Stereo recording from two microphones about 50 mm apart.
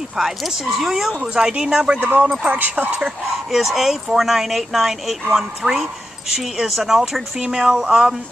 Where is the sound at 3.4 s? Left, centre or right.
Centre.